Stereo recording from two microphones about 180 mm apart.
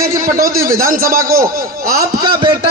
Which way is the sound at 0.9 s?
45° right (ahead or behind).